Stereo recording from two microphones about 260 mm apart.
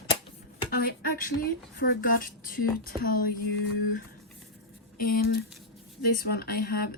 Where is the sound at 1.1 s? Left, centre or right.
Left.